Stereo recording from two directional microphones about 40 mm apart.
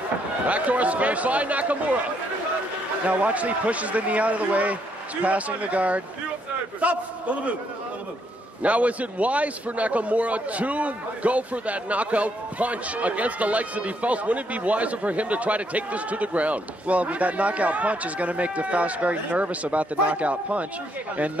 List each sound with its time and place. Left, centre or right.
0.5 s a man's voice: right
3.1 s a man's voice: right
8.6 s a man's voice: right